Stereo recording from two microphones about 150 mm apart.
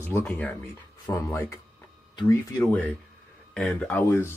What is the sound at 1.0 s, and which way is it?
Speech, 20° left (ahead or behind).